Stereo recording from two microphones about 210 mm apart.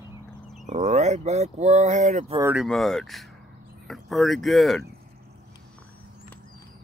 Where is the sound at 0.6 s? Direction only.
35° right (ahead or behind).